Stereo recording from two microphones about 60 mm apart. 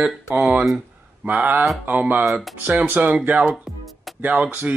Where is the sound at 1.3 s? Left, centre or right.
Right.